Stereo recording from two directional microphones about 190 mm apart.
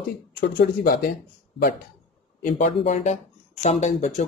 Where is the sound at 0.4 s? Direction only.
55° left (ahead or behind).